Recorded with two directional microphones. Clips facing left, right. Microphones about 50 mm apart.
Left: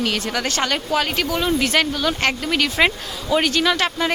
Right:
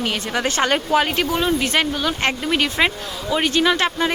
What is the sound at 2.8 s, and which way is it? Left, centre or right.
Speech, centre.